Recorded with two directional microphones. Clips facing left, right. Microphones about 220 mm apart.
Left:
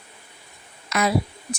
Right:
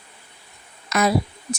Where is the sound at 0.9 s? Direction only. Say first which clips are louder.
Right 2 dB; 40° right (ahead or behind).